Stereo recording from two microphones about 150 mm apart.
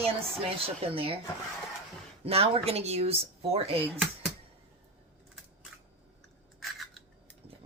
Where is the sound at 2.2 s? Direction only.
40° right (ahead or behind).